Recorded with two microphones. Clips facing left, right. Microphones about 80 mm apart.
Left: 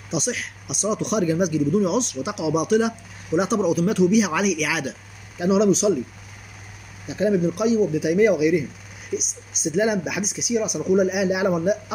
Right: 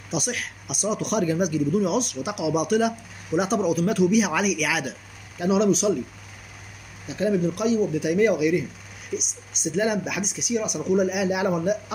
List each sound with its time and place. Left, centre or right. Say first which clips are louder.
0.1 s a man's voice: left 2 dB; centre
7.1 s speech: left 2 dB; left
9.8 s speech: left 2 dB; centre